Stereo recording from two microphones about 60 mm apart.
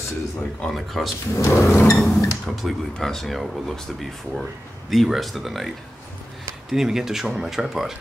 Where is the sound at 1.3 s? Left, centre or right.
Left.